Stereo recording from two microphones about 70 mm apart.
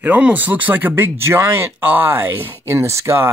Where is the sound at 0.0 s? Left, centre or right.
Right.